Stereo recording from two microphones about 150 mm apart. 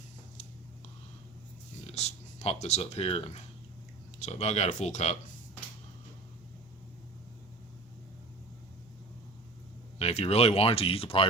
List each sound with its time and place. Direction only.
1.9 s speech: 45° left (ahead or behind)
10.0 s speech: 45° left (ahead or behind)